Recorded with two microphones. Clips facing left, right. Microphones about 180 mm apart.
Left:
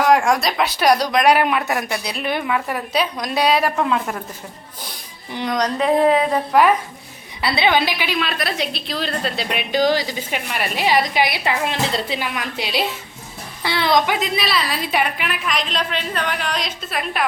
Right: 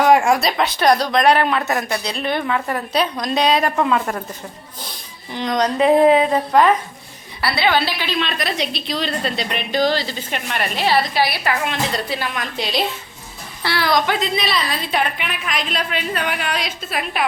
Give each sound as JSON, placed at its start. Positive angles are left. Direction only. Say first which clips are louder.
{"t": 0.0, "sound": "speech", "louder": "right 2 dB", "side_deg": -5}
{"t": 5.3, "sound": "speech", "louder": "right 1 dB", "side_deg": 10}
{"t": 5.5, "sound": "a woman's voice", "louder": "right 4 dB", "side_deg": -5}
{"t": 7.4, "sound": "a woman's voice", "louder": "left 1 dB", "side_deg": 20}
{"t": 12.3, "sound": "a woman's voice", "louder": "right 1 dB", "side_deg": 10}
{"t": 14.2, "sound": "a woman's voice", "louder": "even", "side_deg": 5}